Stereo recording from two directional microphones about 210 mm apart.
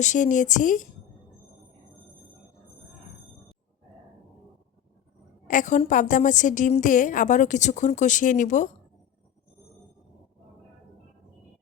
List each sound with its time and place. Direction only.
0.0 s a woman's voice: 35° left (ahead or behind)
5.5 s a woman's voice: 35° left (ahead or behind)